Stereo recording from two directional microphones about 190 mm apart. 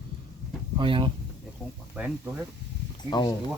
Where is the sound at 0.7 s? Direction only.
25° right (ahead or behind).